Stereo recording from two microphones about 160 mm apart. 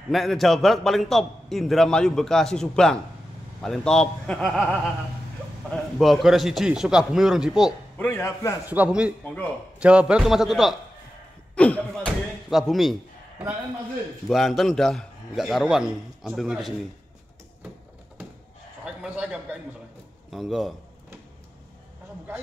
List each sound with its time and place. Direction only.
0.1 s a man's voice: centre (ahead or behind)
8.0 s a man's voice: 15° left (ahead or behind)
8.6 s a man's voice: 10° right (ahead or behind)
14.3 s a man's voice: centre (ahead or behind)
19.0 s a man's voice: 5° right (ahead or behind)